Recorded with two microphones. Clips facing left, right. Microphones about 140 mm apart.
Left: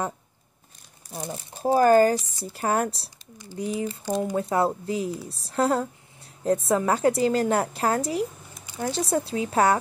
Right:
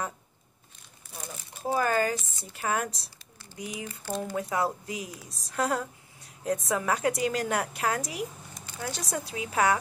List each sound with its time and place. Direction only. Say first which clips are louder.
1.1 s speech: left 8 dB; 35° left (ahead or behind)